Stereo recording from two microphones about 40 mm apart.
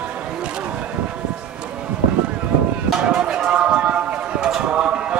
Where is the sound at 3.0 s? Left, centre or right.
Right.